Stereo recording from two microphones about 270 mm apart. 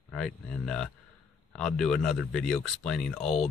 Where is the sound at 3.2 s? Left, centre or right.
Left.